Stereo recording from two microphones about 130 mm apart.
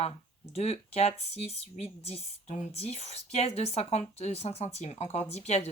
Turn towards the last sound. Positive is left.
turn(degrees=60)  # may be behind; listen again after turning